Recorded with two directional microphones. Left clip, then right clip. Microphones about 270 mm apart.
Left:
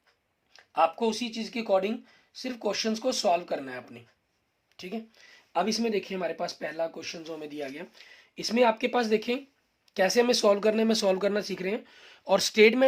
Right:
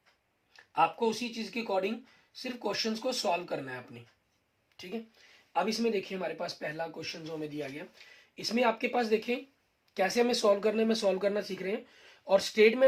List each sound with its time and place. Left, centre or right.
0.5 s speech: left